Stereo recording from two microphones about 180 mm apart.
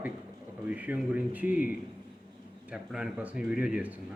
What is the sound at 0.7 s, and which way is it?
A man's voice, 5° right (ahead or behind).